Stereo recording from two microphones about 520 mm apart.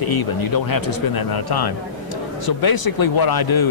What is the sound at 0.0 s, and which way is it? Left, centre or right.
A man's voice, left.